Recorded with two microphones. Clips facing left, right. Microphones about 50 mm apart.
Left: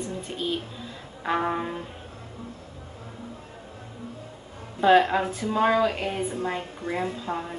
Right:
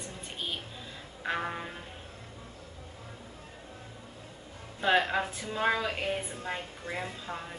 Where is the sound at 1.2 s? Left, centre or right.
Centre.